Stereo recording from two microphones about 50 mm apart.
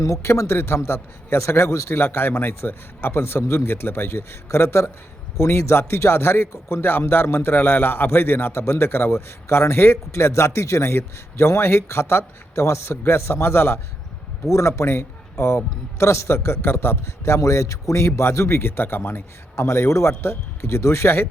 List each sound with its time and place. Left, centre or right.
0.0 s a man's voice: left
2.0 s a man's voice: left
6.5 s a man's voice: left
6.8 s a man's voice: left
14.5 s a man's voice: left
19.6 s a man's voice: left